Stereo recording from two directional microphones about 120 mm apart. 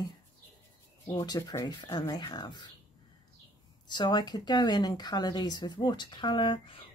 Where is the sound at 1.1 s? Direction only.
35° left (ahead or behind).